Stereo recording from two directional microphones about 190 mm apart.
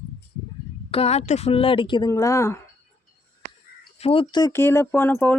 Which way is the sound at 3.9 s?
30° left (ahead or behind).